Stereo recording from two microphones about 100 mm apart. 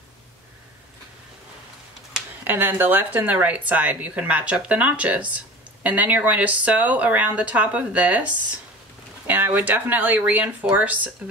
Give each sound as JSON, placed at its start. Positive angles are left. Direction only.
{"t": 2.4, "sound": "speech", "side_deg": -20}